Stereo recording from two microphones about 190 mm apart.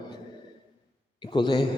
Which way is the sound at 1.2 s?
25° left (ahead or behind).